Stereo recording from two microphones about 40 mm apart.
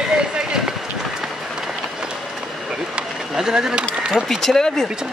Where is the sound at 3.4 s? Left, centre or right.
Centre.